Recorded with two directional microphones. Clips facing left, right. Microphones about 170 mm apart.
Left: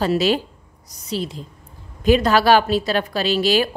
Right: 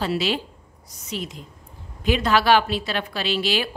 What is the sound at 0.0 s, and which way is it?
A woman's voice, 45° left (ahead or behind).